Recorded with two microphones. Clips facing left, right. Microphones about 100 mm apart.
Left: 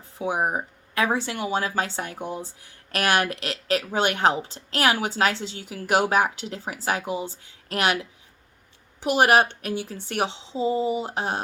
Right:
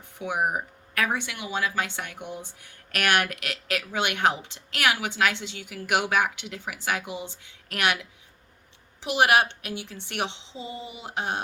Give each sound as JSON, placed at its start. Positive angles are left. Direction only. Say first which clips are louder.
{"t": 0.2, "sound": "speech", "louder": "left 2 dB", "side_deg": 30}
{"t": 9.0, "sound": "speech", "louder": "left 3 dB", "side_deg": 45}